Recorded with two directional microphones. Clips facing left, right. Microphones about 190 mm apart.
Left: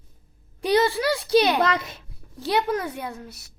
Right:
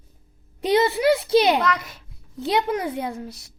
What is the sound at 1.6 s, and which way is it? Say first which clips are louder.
Speech: left 1 dB; 30° left (ahead or behind).